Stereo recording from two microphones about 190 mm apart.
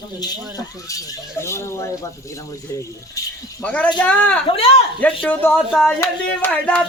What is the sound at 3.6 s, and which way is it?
Music, 5° left (ahead or behind).